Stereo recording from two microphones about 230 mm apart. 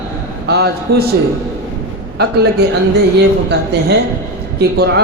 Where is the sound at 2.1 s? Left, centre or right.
Right.